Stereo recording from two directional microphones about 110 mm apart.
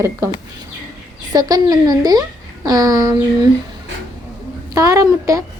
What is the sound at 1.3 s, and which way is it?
Speech, 35° right (ahead or behind).